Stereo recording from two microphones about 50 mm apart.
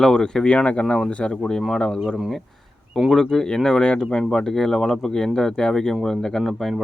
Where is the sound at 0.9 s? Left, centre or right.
Centre.